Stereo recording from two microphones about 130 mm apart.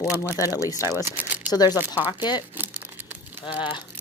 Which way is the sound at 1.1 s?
15° right (ahead or behind).